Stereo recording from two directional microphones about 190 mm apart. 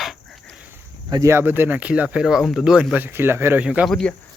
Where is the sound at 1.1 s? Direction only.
15° right (ahead or behind); by 4.1 s centre (ahead or behind).